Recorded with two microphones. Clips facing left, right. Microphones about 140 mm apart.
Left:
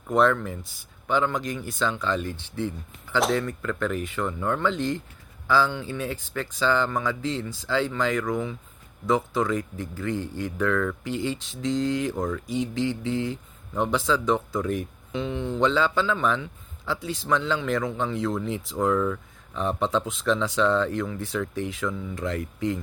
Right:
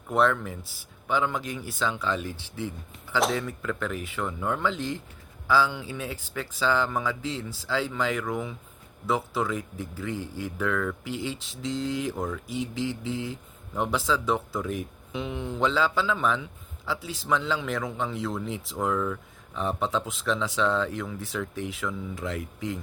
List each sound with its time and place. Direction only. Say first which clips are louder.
0.1 s speech: left 3 dB; 5° right (ahead or behind)